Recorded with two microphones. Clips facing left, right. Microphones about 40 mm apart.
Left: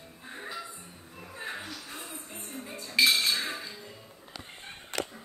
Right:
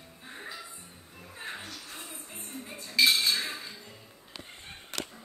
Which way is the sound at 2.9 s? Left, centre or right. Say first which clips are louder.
Even; centre.